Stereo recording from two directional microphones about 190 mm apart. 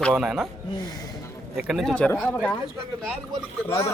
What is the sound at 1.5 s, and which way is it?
Speech, centre (ahead or behind).